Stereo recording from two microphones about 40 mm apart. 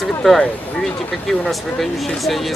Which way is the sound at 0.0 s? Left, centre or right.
Centre.